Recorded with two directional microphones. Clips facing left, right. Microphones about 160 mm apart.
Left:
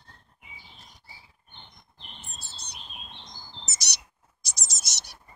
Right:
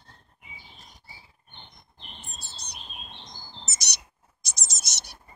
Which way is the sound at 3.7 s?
20° right (ahead or behind).